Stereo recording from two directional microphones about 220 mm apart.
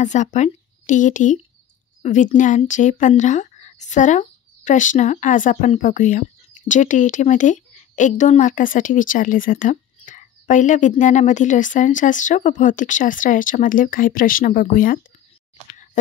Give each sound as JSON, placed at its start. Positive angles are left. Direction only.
{"t": 0.0, "sound": "a woman's voice", "side_deg": 35}